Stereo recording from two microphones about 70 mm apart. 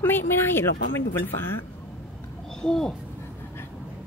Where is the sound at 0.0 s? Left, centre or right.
Left.